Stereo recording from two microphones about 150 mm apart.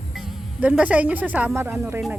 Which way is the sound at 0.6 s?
10° right (ahead or behind).